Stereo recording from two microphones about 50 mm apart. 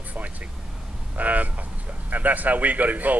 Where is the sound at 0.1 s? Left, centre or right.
Right.